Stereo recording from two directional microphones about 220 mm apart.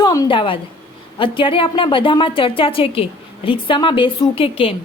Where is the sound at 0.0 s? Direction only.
15° left (ahead or behind).